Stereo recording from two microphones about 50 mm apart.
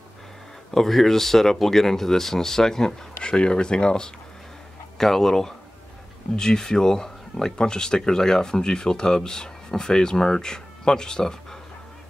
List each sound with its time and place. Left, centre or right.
0.7 s speech: centre